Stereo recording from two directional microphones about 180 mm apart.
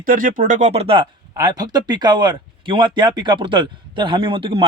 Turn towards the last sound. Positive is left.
turn(degrees=-30)  # may be behind; listen again after turning